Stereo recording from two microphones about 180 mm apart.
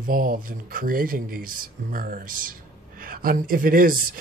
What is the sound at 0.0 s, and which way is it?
Speech, 50° right (ahead or behind).